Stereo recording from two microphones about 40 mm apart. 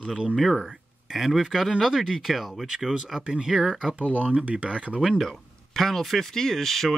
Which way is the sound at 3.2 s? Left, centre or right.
Centre.